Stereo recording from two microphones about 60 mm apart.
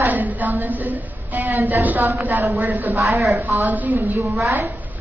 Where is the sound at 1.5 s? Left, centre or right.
Right.